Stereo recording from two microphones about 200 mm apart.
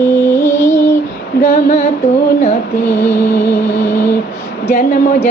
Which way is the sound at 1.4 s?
50° left (ahead or behind).